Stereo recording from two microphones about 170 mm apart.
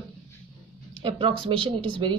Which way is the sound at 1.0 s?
30° right (ahead or behind).